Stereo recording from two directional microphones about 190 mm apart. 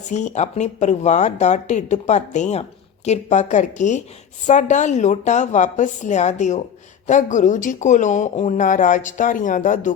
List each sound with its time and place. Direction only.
0.0 s speech: 40° left (ahead or behind)